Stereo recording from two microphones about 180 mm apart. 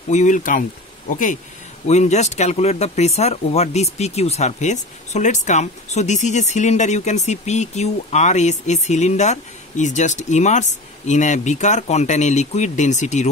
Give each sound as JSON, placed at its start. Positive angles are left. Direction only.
{"t": 0.1, "sound": "speech", "side_deg": 45}